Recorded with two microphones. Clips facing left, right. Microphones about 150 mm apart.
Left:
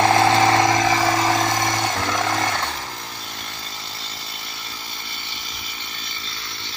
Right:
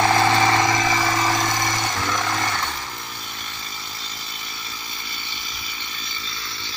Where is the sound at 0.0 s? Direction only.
30° left (ahead or behind).